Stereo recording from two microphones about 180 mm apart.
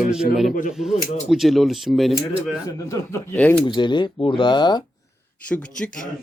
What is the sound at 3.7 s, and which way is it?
Speech, 25° left (ahead or behind).